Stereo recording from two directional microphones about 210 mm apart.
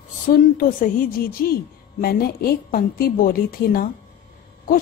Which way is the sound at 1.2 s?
45° left (ahead or behind).